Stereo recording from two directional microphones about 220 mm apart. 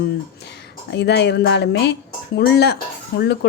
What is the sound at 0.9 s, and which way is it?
Speech, 50° left (ahead or behind).